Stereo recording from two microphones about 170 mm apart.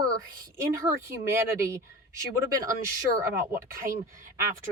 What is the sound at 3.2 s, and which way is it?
Speech, 15° right (ahead or behind).